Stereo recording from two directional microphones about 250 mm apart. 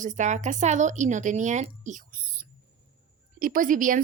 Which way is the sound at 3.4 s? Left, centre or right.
Right.